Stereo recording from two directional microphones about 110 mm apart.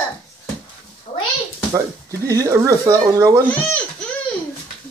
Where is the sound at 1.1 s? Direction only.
80° left.